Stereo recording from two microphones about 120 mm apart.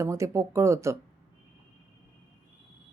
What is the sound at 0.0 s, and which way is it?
Speech, 25° right (ahead or behind).